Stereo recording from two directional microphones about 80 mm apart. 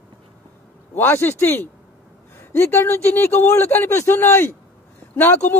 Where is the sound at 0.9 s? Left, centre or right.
Left.